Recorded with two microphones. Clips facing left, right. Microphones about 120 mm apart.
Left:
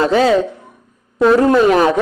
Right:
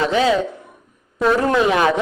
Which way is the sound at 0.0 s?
40° left (ahead or behind).